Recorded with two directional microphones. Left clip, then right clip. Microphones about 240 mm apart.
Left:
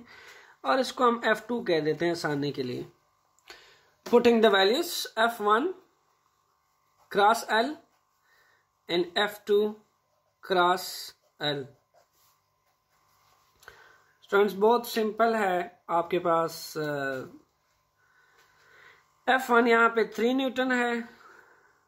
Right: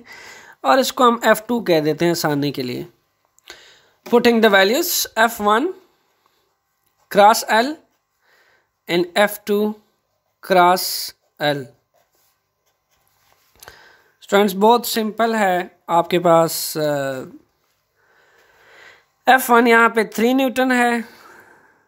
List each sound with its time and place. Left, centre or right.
0.0 s speech: right
7.1 s speech: right
8.8 s speech: right
14.2 s speech: right
18.7 s speech: right